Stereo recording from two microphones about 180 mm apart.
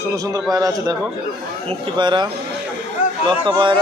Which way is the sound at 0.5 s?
20° right (ahead or behind).